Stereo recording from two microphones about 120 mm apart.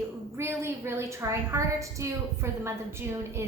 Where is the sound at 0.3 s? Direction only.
20° right (ahead or behind).